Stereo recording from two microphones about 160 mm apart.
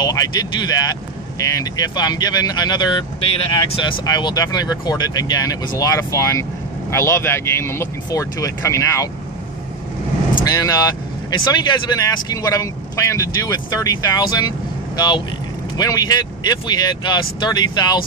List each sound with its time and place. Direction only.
0.0 s speech: 25° left (ahead or behind)
10.4 s speech: 25° left (ahead or behind)